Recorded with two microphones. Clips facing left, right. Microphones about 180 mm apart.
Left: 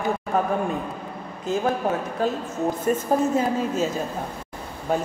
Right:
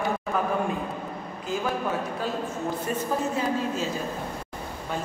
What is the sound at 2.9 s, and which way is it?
A woman's voice, 45° left (ahead or behind).